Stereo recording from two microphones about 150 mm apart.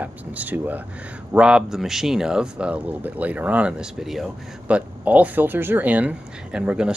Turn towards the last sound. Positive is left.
turn(degrees=-5)  # may be behind; listen again after turning